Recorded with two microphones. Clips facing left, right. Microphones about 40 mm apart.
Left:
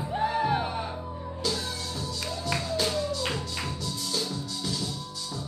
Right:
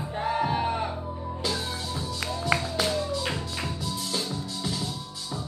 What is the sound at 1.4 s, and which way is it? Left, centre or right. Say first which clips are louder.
Music: even; right.